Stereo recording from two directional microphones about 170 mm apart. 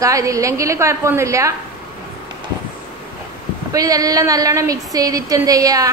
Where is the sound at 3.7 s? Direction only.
20° right (ahead or behind).